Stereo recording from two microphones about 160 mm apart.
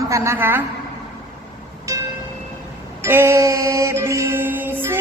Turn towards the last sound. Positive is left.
turn(degrees=-15)  # may be behind; listen again after turning